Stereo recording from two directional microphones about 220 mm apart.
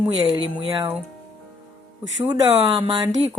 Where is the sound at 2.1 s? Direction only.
15° right (ahead or behind).